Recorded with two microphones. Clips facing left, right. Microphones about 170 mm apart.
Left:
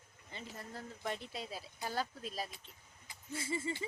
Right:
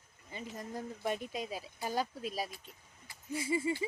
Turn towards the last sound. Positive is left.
turn(degrees=-15)  # may be behind; listen again after turning